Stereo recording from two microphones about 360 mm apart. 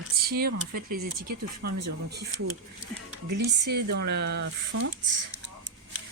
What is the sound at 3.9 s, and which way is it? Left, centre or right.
Speech, right.